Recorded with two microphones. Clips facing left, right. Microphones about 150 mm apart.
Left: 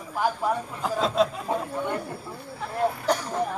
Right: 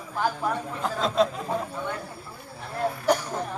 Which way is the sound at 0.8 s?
5° left (ahead or behind).